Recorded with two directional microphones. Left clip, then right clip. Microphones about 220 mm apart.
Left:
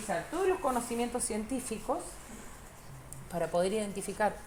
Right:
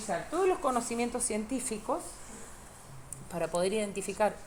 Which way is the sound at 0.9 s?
Centre (ahead or behind).